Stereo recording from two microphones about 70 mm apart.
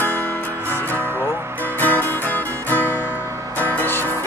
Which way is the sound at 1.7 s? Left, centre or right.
Left.